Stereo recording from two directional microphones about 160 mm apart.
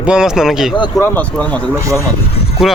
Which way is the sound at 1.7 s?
20° right (ahead or behind).